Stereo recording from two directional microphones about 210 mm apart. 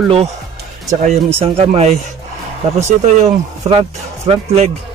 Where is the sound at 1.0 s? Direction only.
30° right (ahead or behind).